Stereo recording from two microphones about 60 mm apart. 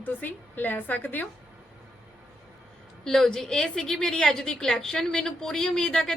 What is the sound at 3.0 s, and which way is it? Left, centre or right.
A woman's voice, centre.